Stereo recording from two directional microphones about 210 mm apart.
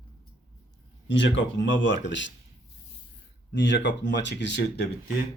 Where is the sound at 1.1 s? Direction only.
60° left (ahead or behind).